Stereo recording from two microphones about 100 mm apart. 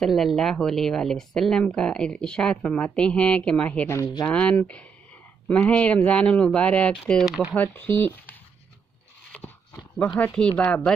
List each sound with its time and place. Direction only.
0.0 s a woman's voice: centre (ahead or behind); by 8.4 s 20° left (ahead or behind)
9.9 s a woman's voice: 15° left (ahead or behind)